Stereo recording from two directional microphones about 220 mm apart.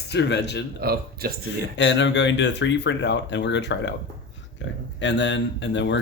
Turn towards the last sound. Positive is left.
turn(degrees=55)  # may be behind; listen again after turning